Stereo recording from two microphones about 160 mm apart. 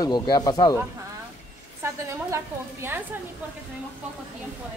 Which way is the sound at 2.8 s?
15° right (ahead or behind).